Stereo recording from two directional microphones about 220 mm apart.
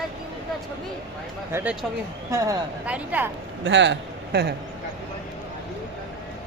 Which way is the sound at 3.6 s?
55° right (ahead or behind).